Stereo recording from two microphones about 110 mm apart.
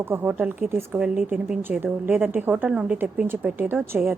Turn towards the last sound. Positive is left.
turn(degrees=-15)  # may be behind; listen again after turning